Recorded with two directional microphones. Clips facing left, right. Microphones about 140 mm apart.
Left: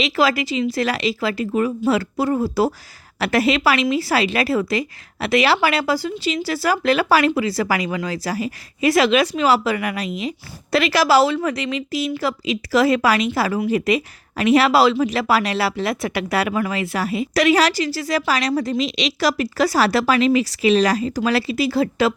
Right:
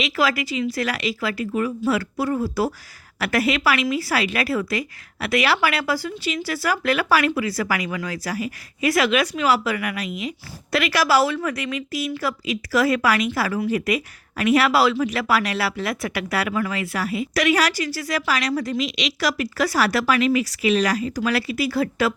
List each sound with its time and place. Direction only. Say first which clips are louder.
0.0 s speech: left 3 dB; 25° left (ahead or behind)